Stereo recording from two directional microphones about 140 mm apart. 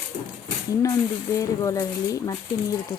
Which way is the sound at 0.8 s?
25° left (ahead or behind).